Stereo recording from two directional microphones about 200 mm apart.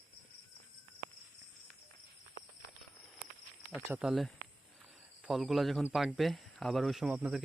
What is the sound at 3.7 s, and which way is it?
Speech, 5° right (ahead or behind).